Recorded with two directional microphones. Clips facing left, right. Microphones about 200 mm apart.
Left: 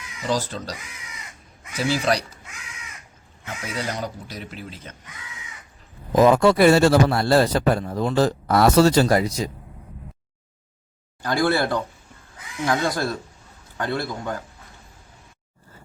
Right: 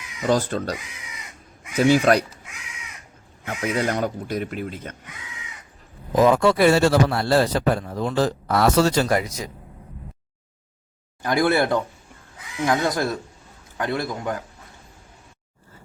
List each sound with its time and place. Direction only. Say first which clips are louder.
0.3 s speech: right 4 dB; 55° right (ahead or behind)
1.8 s speech: right 6 dB; 55° right (ahead or behind)
3.4 s speech: right 6 dB; 55° right (ahead or behind)
6.3 s a man's voice: left 2 dB; 40° left (ahead or behind)
11.2 s a man's voice: right 2 dB; 20° right (ahead or behind)